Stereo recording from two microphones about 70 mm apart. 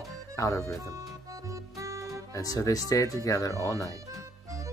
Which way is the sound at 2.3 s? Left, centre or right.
Left.